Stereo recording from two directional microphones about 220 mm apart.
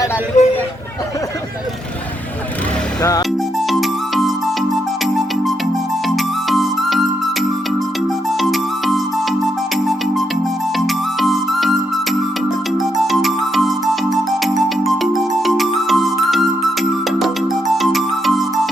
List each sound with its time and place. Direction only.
0.4 s speech: 30° left (ahead or behind)
3.0 s speech: 15° left (ahead or behind)
3.7 s music: centre (ahead or behind)
8.4 s music: centre (ahead or behind)
10.8 s music: centre (ahead or behind)
13.1 s music: centre (ahead or behind)